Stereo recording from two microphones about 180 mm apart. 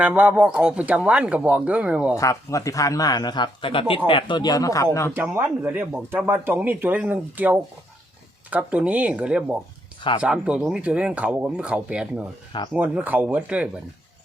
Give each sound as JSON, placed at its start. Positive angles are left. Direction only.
{"t": 0.0, "sound": "speech", "side_deg": -10}
{"t": 2.1, "sound": "speech", "side_deg": 20}
{"t": 5.1, "sound": "speech", "side_deg": -10}